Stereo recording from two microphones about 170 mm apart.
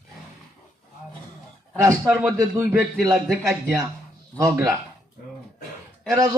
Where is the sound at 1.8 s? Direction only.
15° right (ahead or behind).